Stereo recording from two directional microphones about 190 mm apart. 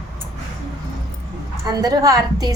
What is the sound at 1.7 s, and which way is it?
Speech, 20° right (ahead or behind).